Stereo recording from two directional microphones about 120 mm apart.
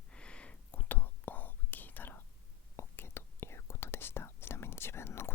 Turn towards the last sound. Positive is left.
turn(degrees=20)  # may be behind; listen again after turning